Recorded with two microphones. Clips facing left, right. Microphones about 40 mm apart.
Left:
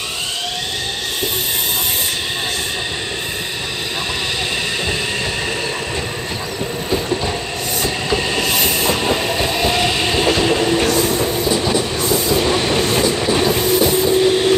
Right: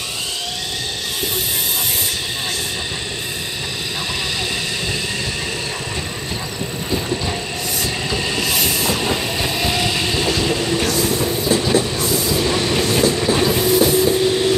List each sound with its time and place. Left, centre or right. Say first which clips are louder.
7.8 s train: left 4 dB; centre
12.0 s train: left 2 dB; left